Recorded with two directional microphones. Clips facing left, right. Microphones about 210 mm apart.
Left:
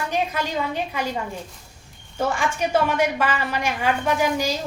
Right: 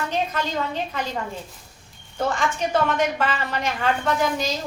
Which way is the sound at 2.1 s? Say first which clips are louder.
Even; 10° left (ahead or behind).